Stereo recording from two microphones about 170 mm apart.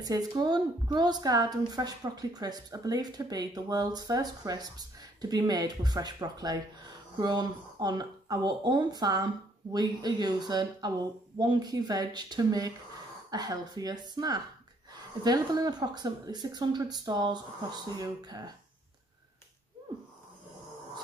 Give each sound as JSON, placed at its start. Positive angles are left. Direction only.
{"t": 0.0, "sound": "a woman's voice", "side_deg": -20}